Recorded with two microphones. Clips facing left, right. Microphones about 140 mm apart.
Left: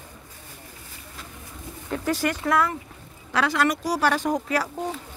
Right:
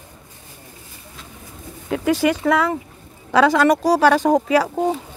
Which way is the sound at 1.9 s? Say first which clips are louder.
Right 7 dB; 90° right.